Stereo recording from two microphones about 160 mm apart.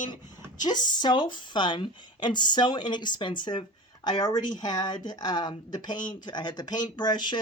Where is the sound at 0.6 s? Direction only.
25° left (ahead or behind).